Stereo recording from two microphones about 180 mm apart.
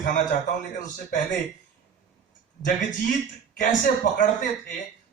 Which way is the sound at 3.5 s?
50° left (ahead or behind).